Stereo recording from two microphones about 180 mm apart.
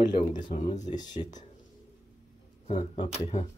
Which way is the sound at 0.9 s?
25° left (ahead or behind).